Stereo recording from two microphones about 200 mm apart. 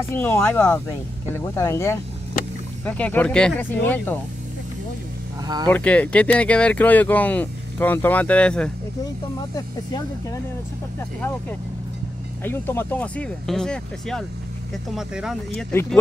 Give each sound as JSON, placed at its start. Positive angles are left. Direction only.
{"t": 0.1, "sound": "speech", "side_deg": 10}
{"t": 5.7, "sound": "speech", "side_deg": 5}
{"t": 9.6, "sound": "speech", "side_deg": 15}
{"t": 12.4, "sound": "speech", "side_deg": 10}
{"t": 15.5, "sound": "speech", "side_deg": 10}